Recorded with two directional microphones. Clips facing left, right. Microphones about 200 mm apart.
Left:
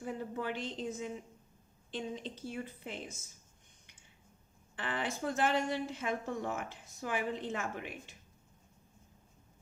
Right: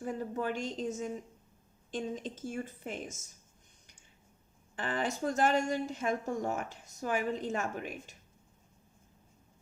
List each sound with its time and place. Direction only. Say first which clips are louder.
0.0 s a woman's voice: right 3 dB; 40° right (ahead or behind)
4.8 s a woman's voice: right 3 dB; 40° right (ahead or behind)